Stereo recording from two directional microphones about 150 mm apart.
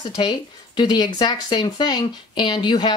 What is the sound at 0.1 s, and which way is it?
Speech, 30° left (ahead or behind).